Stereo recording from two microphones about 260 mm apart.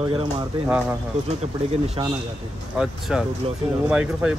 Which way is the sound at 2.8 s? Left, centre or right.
Centre.